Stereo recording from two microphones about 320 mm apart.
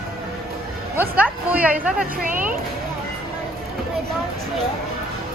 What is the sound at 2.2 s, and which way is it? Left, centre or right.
Speech, right.